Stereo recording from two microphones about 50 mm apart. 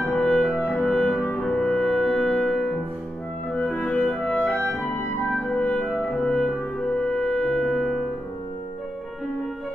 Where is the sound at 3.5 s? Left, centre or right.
Left.